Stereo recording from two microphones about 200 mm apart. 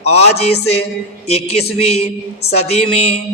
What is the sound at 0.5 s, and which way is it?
Speech, 90° left.